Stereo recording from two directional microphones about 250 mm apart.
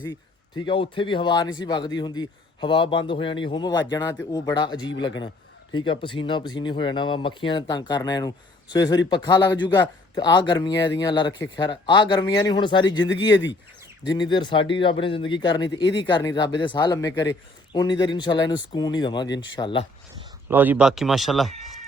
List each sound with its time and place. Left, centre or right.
0.0 s speech: centre
13.3 s speech: left
14.2 s speech: centre
20.5 s speech: centre